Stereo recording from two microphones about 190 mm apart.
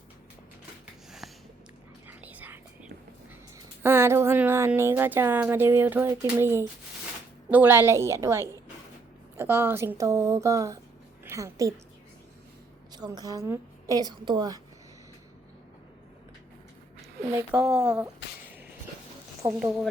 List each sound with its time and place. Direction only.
1.2 s a sound: centre (ahead or behind)
2.0 s whispering: 10° right (ahead or behind)
3.8 s a woman's voice: 15° right (ahead or behind)
12.9 s a woman's voice: 20° right (ahead or behind)
17.5 s speech: 5° right (ahead or behind)
19.5 s speech: 5° right (ahead or behind)